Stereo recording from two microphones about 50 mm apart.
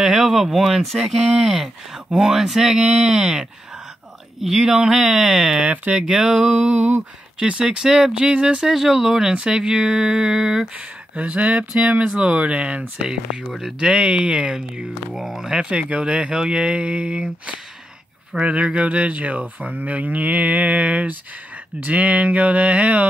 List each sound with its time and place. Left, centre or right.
0.0 s speech: centre
4.4 s speech: centre
5.6 s speech: right
6.0 s speech: centre
6.6 s speech: right
8.6 s speech: centre
9.3 s speech: centre
10.8 s speech: right
15.1 s speech: centre
15.6 s speech: right